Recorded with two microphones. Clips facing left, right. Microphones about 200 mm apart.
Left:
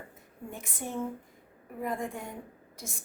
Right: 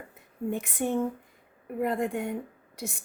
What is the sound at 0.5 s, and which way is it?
A woman's voice, 65° right (ahead or behind).